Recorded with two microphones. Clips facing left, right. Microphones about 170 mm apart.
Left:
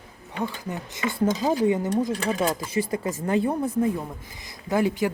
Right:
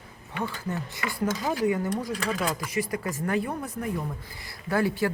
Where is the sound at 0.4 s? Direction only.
15° left (ahead or behind).